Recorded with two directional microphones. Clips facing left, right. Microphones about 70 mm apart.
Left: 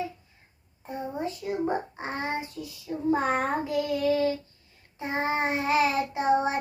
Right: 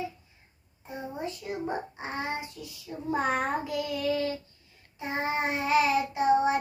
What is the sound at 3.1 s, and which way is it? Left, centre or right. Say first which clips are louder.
Child singing: left 2 dB; left.